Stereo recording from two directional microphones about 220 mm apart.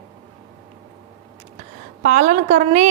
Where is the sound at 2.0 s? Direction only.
35° right (ahead or behind).